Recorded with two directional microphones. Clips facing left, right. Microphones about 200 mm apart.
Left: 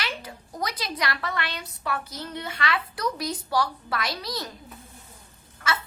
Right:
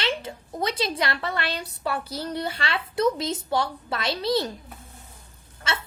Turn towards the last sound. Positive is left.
turn(degrees=-25)  # may be behind; listen again after turning